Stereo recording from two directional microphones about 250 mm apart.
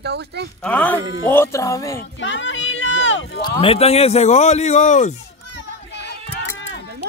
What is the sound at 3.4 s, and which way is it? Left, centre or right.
A man's voice, centre.